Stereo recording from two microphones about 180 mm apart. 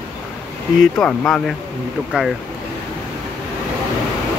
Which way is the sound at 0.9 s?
5° left (ahead or behind).